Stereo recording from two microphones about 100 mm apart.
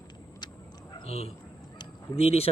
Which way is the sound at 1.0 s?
90° left.